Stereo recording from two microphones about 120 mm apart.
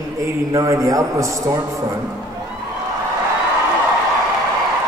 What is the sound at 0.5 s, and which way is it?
A man's voice, 25° right (ahead or behind).